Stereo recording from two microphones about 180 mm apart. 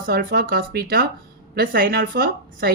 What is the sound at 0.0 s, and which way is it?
Speech, 55° right (ahead or behind).